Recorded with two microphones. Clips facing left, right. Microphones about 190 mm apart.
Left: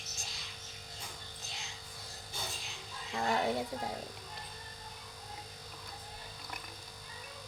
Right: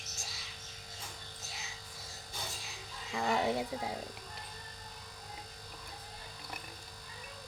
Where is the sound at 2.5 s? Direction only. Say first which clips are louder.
Left 1 dB; centre (ahead or behind).